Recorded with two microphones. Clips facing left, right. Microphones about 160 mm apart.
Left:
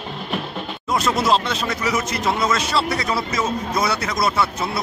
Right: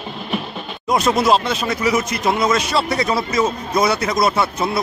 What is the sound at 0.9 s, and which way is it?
Speech, 15° right (ahead or behind).